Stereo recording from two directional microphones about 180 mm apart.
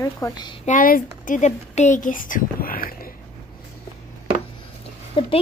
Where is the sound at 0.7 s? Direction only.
50° left (ahead or behind).